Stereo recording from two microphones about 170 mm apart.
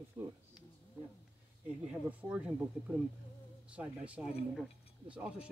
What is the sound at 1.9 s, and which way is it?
Speech, 5° right (ahead or behind).